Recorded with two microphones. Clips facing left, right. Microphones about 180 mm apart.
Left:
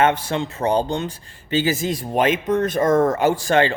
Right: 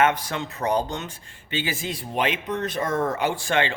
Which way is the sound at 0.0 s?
30° left (ahead or behind).